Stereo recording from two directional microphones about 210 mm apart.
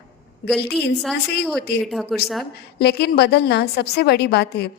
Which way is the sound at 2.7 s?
50° left (ahead or behind).